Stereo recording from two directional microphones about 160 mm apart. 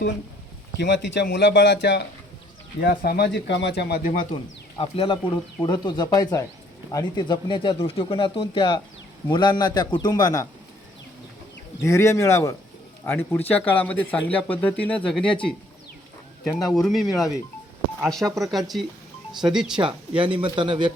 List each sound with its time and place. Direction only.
0.8 s a man's voice: 90° left
2.8 s speech: 70° left (ahead or behind)
4.8 s a man's voice: 30° left (ahead or behind)
11.8 s speech: 20° left (ahead or behind); by 19.7 s 5° right (ahead or behind)
19.7 s speech: 30° right (ahead or behind)